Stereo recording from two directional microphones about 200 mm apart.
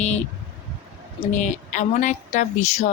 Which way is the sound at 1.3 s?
40° left (ahead or behind).